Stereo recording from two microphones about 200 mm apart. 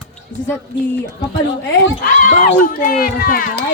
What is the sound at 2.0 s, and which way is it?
Speech, 40° left (ahead or behind).